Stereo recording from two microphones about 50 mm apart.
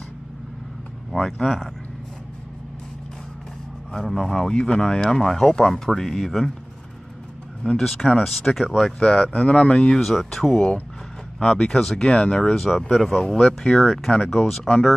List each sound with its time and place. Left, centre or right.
1.2 s speech: centre
3.9 s speech: centre
7.8 s speech: centre
9.0 s speech: left
10.0 s speech: centre